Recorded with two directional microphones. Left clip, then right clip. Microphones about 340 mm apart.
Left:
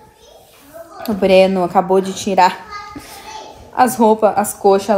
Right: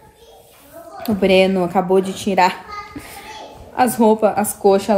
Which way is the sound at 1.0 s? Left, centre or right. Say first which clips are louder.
Left 3 dB; centre.